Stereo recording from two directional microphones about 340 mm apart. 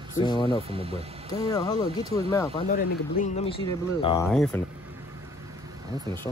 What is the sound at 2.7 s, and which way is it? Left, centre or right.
Speech, left.